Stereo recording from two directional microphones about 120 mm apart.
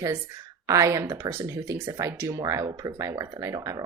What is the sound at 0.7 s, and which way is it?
Speech, 25° right (ahead or behind).